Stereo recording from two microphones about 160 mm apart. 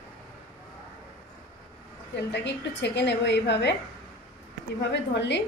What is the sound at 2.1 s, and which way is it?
A woman's voice, 90° left.